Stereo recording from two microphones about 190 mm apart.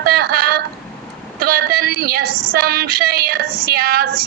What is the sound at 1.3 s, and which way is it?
Female singing, 50° right (ahead or behind).